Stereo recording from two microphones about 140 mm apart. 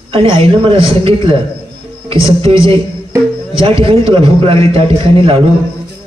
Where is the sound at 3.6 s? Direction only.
40° right (ahead or behind).